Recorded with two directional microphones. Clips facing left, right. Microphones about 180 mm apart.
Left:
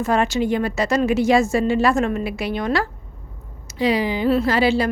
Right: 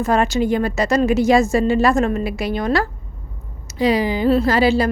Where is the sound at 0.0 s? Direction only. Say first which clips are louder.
Right 2 dB; 40° right (ahead or behind).